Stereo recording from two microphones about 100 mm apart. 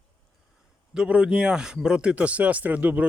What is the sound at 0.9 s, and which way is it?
Speech, 10° right (ahead or behind).